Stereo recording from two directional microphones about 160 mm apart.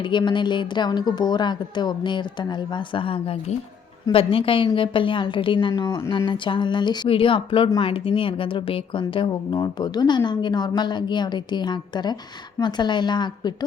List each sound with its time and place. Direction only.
0.0 s a woman's voice: 30° left (ahead or behind)